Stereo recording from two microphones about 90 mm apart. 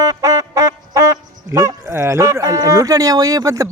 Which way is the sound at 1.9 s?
30° right (ahead or behind).